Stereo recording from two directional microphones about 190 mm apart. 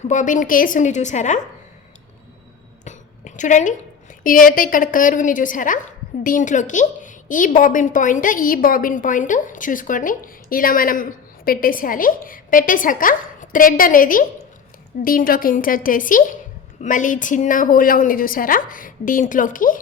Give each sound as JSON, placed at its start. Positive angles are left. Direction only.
{"t": 0.1, "sound": "a woman's voice", "side_deg": 40}
{"t": 2.8, "sound": "a sound", "side_deg": 40}
{"t": 4.2, "sound": "a woman's voice", "side_deg": 45}